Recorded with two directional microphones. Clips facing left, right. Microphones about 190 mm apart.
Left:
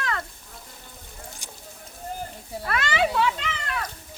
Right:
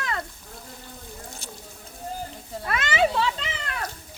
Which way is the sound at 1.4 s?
15° left (ahead or behind).